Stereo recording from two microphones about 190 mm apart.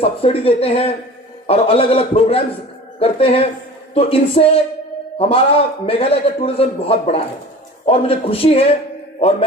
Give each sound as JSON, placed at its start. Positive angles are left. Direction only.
{"t": 0.0, "sound": "a man's voice", "side_deg": 30}